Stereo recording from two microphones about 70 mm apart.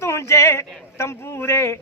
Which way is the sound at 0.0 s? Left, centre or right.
Left.